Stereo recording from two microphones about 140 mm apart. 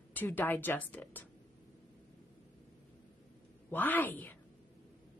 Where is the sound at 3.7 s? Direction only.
15° left (ahead or behind).